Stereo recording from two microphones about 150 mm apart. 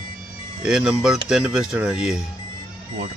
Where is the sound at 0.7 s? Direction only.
5° right (ahead or behind).